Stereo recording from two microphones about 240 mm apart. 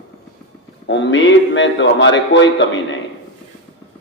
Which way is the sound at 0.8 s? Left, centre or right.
Left.